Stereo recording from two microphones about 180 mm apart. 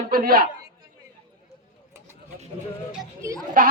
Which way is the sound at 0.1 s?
55° right (ahead or behind).